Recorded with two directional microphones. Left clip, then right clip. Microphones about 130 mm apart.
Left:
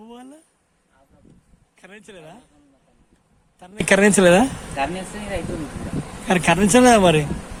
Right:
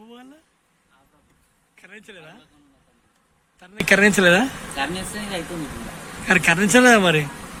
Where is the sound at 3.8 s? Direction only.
40° left (ahead or behind).